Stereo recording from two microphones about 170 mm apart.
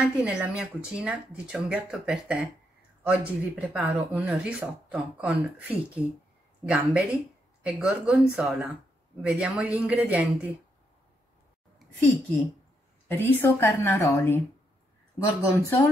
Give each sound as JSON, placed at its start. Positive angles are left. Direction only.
{"t": 0.0, "sound": "speech", "side_deg": -10}
{"t": 13.1, "sound": "a woman's voice", "side_deg": 10}
{"t": 15.4, "sound": "a woman's voice", "side_deg": 15}